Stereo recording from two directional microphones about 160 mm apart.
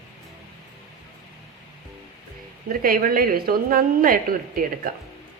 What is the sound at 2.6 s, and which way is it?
A woman's voice, 65° right (ahead or behind).